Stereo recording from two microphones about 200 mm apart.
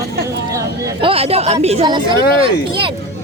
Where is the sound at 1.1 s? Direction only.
30° right (ahead or behind).